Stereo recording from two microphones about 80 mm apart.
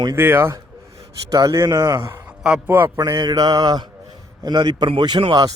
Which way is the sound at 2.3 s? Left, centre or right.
Centre.